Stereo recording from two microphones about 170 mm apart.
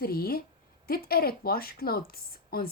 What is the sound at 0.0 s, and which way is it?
A woman's voice, 65° left (ahead or behind).